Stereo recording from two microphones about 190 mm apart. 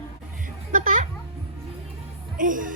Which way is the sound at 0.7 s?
45° right (ahead or behind).